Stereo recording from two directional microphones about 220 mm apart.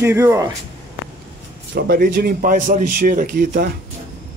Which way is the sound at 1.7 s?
45° right (ahead or behind).